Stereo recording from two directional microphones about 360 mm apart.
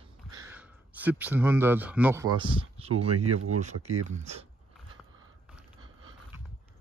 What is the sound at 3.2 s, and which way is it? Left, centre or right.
Speech, right.